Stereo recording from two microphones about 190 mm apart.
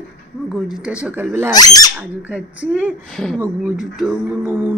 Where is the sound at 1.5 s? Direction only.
20° left (ahead or behind).